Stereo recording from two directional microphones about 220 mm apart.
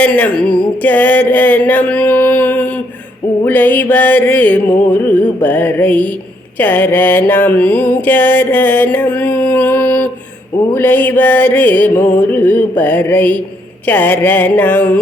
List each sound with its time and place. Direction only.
0.0 s a sound: 5° left (ahead or behind)
0.8 s music: 5° left (ahead or behind)
6.6 s mantra: 10° left (ahead or behind)
10.8 s music: 10° left (ahead or behind)